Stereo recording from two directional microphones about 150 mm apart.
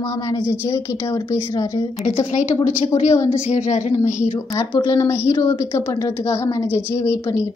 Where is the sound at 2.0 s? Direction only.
50° left (ahead or behind).